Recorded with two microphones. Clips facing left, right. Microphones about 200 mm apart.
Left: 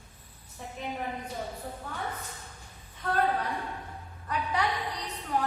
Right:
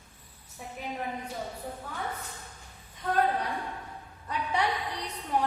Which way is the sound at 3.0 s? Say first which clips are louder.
Right 1 dB; 15° right (ahead or behind).